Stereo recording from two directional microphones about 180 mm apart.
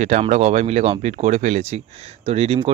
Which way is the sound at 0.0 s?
45° right (ahead or behind).